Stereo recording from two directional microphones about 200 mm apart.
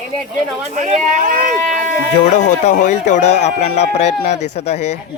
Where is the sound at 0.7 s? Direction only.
35° right (ahead or behind).